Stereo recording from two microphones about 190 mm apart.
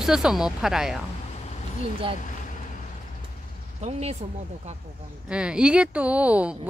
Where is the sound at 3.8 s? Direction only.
35° right (ahead or behind).